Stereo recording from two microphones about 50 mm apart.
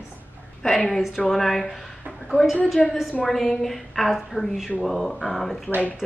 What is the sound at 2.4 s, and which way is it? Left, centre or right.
Speech, left.